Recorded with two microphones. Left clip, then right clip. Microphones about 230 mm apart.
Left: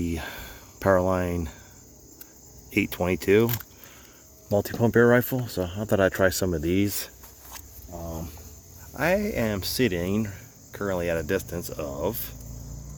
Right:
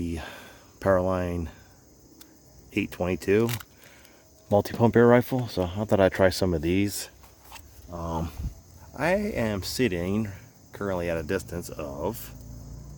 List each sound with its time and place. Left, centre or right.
0.0 s cricket: centre
2.7 s speech: centre
3.4 s speech: centre
4.5 s speech: centre
7.9 s speech: right
8.9 s speech: centre